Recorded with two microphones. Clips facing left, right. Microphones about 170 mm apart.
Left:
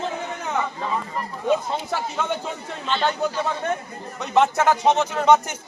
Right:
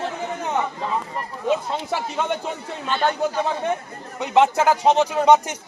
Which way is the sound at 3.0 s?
10° right (ahead or behind).